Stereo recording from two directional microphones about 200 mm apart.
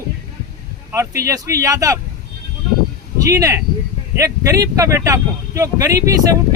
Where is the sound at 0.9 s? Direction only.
15° right (ahead or behind).